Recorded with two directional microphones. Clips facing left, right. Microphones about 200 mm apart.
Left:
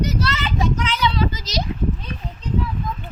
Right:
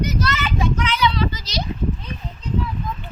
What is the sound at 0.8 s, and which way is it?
Children playing, 45° left (ahead or behind).